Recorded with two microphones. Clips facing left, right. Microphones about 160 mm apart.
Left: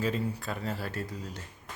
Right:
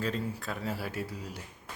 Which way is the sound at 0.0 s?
Centre (ahead or behind).